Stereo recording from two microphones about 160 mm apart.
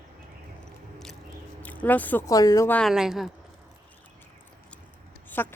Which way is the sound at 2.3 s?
20° left (ahead or behind).